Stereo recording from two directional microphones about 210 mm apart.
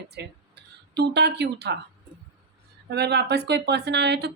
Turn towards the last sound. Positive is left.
turn(degrees=-50)  # may be behind; listen again after turning